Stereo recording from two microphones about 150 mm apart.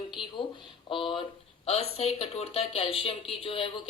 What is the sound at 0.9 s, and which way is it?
Speech, 35° left (ahead or behind).